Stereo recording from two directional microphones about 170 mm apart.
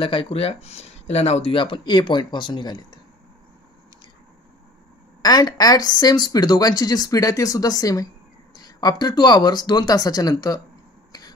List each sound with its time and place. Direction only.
0.0 s speech: 30° left (ahead or behind)
5.2 s speech: 20° left (ahead or behind)
11.1 s a sound: 25° left (ahead or behind)